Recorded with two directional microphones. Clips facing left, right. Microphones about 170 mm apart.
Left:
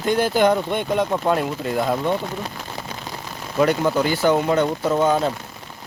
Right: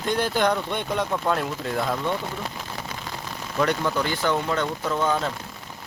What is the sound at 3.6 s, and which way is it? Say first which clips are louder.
Speech: left 5 dB; 10° left (ahead or behind).